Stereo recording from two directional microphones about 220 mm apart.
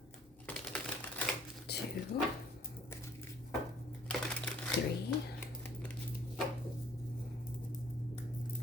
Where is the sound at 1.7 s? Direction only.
50° left (ahead or behind).